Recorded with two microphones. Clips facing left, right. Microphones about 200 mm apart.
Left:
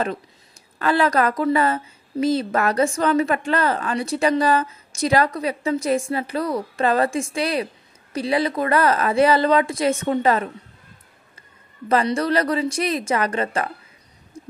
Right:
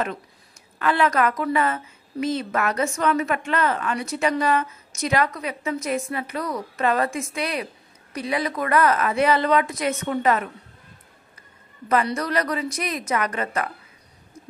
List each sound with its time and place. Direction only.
0.7 s a woman's voice: 35° left (ahead or behind)
11.9 s a woman's voice: 30° left (ahead or behind)
14.3 s a sound: 30° left (ahead or behind)